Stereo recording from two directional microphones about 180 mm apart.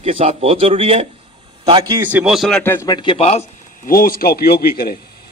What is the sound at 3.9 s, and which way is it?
A man's voice, 55° left (ahead or behind).